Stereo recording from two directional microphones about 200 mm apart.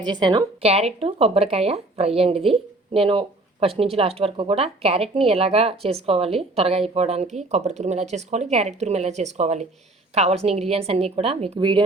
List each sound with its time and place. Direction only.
0.0 s a woman's voice: 20° right (ahead or behind)